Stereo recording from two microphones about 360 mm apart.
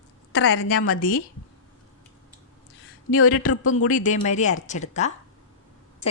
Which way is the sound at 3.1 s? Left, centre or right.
Left.